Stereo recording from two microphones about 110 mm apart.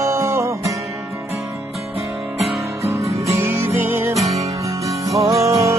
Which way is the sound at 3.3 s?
20° right (ahead or behind).